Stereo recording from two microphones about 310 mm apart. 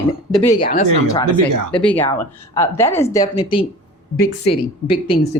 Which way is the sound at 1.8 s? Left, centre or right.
Centre.